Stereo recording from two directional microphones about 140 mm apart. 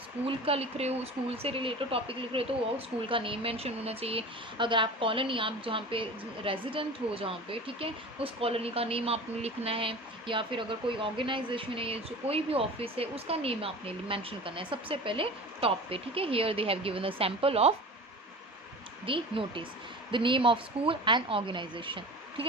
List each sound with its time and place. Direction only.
0.3 s speech: 45° right (ahead or behind)
19.0 s speech: 40° right (ahead or behind)